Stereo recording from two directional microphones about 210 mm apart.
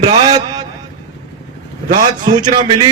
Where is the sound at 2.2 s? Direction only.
20° right (ahead or behind).